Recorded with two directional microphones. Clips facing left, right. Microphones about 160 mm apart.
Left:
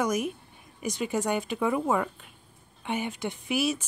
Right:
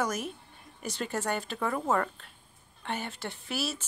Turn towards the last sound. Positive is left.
turn(degrees=15)  # may be behind; listen again after turning